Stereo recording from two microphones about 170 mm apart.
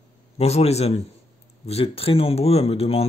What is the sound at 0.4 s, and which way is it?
Speech, 40° left (ahead or behind).